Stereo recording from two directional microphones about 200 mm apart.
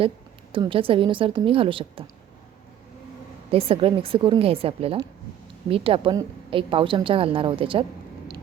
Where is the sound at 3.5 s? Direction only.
25° right (ahead or behind).